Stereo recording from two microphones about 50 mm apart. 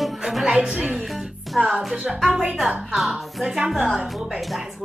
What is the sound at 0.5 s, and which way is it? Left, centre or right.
Speech, centre.